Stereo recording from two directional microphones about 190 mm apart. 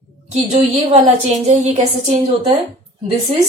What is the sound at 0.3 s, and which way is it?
A woman's voice, 35° right (ahead or behind).